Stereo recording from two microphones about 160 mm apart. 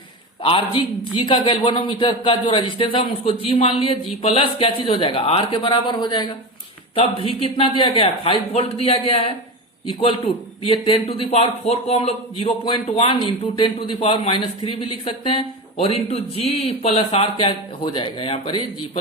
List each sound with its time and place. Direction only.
0.4 s a man's voice: 35° left (ahead or behind)